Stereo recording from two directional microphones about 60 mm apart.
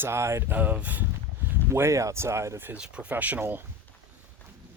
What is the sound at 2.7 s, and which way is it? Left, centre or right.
Speech, centre.